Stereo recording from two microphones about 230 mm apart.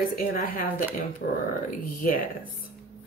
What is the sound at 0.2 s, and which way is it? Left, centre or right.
Speech, left.